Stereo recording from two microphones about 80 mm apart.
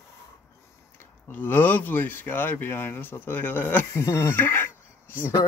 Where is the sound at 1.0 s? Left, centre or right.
Left.